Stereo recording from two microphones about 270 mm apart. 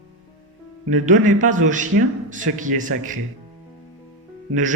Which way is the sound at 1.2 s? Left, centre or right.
Right.